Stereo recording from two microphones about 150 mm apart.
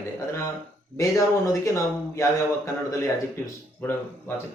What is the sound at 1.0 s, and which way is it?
Speech, 20° left (ahead or behind).